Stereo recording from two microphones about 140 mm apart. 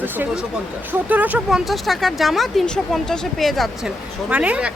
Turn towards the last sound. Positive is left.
turn(degrees=-10)  # may be behind; listen again after turning